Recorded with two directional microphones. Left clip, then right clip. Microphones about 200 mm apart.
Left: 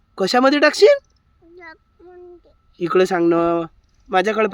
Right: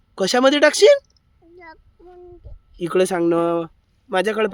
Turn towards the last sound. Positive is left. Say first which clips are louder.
# left 2 dB
turn(degrees=10)  # may be behind; listen again after turning